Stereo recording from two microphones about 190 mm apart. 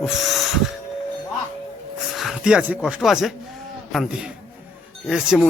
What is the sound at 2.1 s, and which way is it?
Speech, centre (ahead or behind).